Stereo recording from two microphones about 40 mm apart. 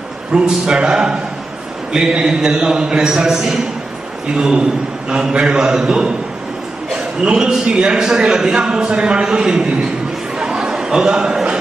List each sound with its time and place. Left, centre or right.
0.3 s a man's voice: centre
7.2 s a man's voice: centre
10.3 s chatter: centre